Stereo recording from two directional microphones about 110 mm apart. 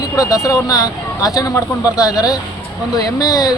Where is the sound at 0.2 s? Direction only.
30° left (ahead or behind).